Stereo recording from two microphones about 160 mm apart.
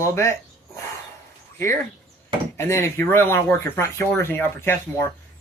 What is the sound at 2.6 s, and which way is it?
Speech, 20° left (ahead or behind).